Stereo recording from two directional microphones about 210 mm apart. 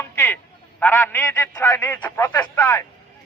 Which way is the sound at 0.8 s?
10° left (ahead or behind).